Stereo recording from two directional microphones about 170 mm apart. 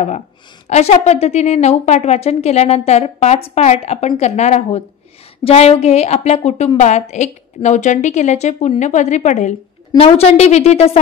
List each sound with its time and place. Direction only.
0.7 s a woman's voice: 40° left (ahead or behind)